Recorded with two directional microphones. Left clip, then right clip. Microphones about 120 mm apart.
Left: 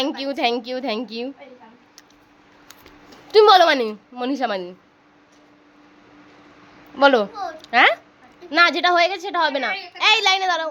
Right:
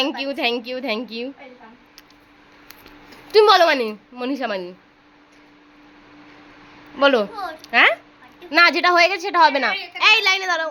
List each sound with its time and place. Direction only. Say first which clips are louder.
0.0 s a woman's voice: even; centre (ahead or behind)
2.6 s speech: right 2 dB; centre (ahead or behind)
6.9 s a woman's voice: left 1 dB; centre (ahead or behind)
8.4 s a woman's voice: right 1 dB; 15° right (ahead or behind)
10.0 s a woman's voice: right 1 dB; centre (ahead or behind)